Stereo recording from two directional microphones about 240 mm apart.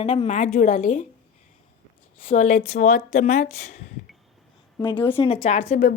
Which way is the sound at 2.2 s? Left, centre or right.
Left.